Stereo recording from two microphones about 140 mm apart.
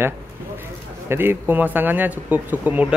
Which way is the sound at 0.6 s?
15° right (ahead or behind).